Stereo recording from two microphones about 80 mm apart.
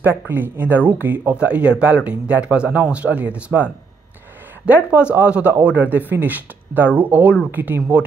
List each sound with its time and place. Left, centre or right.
0.0 s a man's voice: right